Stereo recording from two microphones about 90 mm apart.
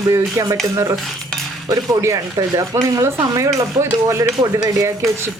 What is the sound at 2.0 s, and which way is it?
Speech, 40° right (ahead or behind).